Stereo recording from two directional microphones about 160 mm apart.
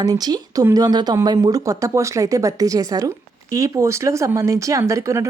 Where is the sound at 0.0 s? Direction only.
25° right (ahead or behind).